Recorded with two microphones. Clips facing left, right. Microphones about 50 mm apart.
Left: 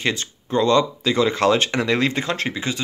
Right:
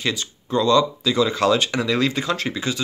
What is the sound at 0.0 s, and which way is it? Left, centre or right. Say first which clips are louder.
Speech: left 1 dB; left.